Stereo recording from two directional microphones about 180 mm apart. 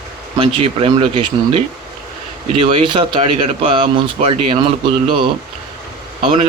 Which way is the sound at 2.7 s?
30° right (ahead or behind).